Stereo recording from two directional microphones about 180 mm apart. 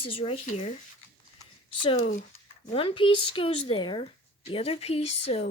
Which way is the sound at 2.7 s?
30° left (ahead or behind).